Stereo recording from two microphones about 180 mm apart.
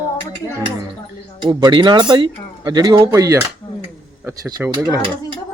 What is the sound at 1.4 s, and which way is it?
Speech, 25° right (ahead or behind).